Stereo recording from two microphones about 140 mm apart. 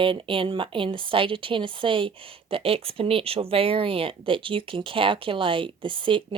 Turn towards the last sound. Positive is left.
turn(degrees=-35)  # may be behind; listen again after turning